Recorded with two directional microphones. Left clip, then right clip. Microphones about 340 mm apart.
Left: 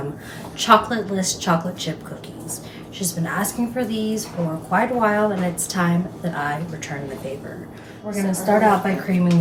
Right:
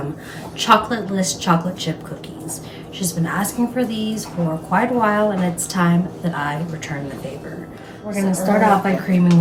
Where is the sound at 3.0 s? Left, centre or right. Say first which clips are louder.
Right 2 dB; centre.